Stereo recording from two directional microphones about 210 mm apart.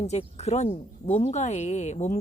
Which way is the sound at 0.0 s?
30° left (ahead or behind).